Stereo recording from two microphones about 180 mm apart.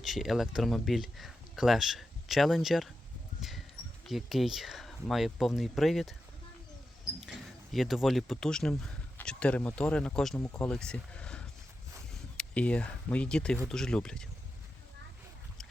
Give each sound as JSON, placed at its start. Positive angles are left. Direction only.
{"t": 0.0, "sound": "speech", "side_deg": 0}
{"t": 4.0, "sound": "speech", "side_deg": 0}
{"t": 7.2, "sound": "speech", "side_deg": 0}